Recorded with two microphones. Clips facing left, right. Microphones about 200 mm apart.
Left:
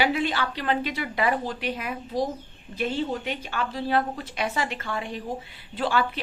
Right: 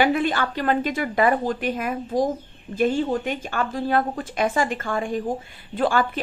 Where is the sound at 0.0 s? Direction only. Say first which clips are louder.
Right 4 dB; 50° right (ahead or behind).